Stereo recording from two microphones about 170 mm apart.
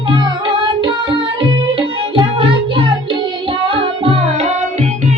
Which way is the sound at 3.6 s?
30° right (ahead or behind).